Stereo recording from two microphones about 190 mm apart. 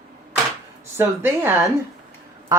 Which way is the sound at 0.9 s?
10° right (ahead or behind).